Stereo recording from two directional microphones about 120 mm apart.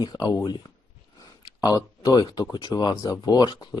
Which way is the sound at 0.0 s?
35° left (ahead or behind).